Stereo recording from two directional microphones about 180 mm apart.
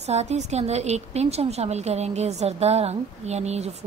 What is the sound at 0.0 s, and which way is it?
A woman's voice, 35° right (ahead or behind).